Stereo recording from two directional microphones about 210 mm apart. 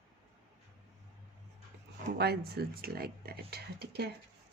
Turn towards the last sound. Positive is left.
turn(degrees=-50)  # may be behind; listen again after turning